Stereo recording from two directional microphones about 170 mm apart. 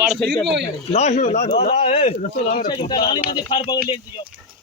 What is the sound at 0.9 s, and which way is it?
A man's voice, 40° left (ahead or behind).